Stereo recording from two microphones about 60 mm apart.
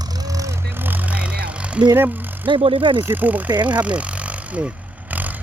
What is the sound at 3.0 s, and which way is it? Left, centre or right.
Speech, right.